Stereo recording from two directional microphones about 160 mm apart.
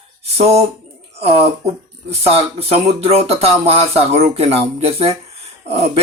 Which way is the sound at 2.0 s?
40° right (ahead or behind).